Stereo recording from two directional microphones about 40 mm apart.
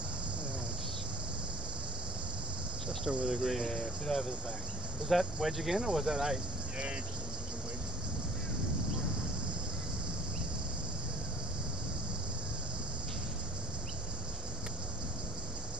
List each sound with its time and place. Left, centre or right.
3.1 s speech: centre
3.6 s speech: centre
5.4 s speech: centre
5.8 s speech: centre